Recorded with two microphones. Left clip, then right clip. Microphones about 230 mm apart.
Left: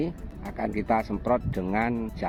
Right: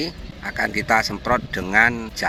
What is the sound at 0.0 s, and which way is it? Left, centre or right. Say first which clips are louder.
Speech: right 5 dB; centre.